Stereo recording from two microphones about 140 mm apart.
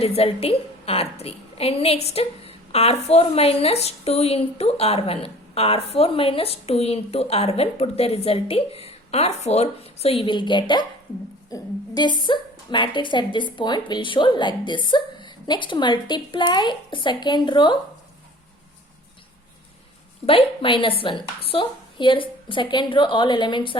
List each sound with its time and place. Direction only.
0.0 s a woman's voice: 45° left (ahead or behind)
20.2 s a woman's voice: 40° left (ahead or behind)